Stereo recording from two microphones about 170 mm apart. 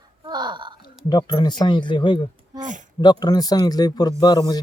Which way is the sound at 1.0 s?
25° left (ahead or behind).